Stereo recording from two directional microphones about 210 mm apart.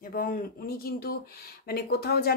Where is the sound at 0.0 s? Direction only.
40° left (ahead or behind).